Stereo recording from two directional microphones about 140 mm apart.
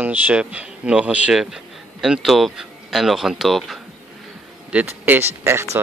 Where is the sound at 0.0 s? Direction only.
10° right (ahead or behind).